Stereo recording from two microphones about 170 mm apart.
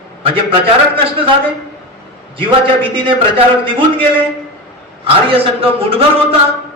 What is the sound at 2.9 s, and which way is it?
A man's voice, 30° right (ahead or behind).